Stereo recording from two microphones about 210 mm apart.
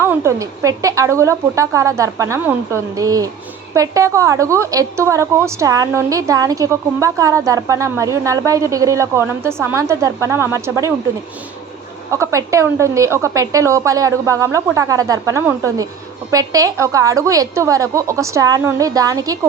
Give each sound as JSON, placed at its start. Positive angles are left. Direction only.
{"t": 0.0, "sound": "a woman's voice", "side_deg": -15}
{"t": 12.1, "sound": "a woman's voice", "side_deg": -15}